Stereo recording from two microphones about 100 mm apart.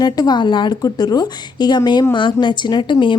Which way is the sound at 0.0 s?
40° left (ahead or behind).